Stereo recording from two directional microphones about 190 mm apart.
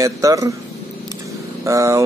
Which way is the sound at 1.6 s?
15° right (ahead or behind).